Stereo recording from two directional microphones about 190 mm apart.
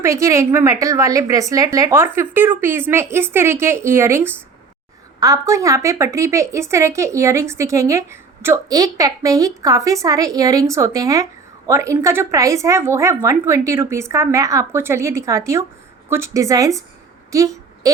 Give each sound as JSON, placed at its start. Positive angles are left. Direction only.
{"t": 0.0, "sound": "a woman's voice", "side_deg": -15}